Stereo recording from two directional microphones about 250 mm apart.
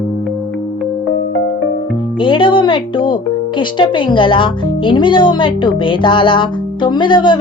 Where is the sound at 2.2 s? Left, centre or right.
Centre.